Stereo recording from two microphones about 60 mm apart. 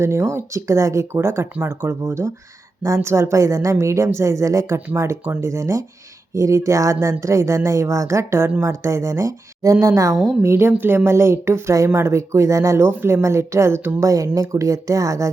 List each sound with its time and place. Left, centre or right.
0.0 s a woman's voice: right
10.4 s speech: right
10.7 s speech: right
11.1 s a woman's voice: right
12.7 s speech: right
13.2 s speech: right
14.0 s a woman's voice: right